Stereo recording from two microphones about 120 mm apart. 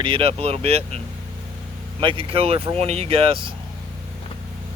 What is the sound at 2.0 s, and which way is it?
Speech, 50° right (ahead or behind).